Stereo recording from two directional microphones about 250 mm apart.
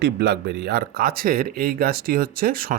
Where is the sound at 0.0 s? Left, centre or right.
Right.